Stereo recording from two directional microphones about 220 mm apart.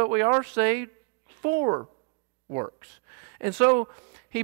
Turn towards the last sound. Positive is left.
turn(degrees=-15)  # may be behind; listen again after turning